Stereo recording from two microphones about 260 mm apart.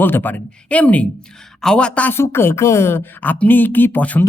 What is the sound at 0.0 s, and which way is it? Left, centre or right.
Speech, centre.